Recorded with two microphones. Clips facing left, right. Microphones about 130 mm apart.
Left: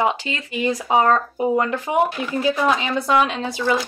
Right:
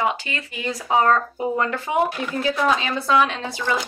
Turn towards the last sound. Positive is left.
turn(degrees=15)  # may be behind; listen again after turning